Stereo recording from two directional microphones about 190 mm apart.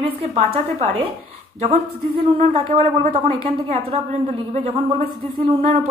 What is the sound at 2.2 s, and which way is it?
A woman's voice, 30° right (ahead or behind).